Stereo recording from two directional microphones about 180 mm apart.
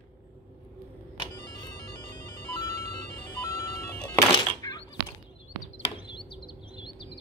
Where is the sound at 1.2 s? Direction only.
25° left (ahead or behind).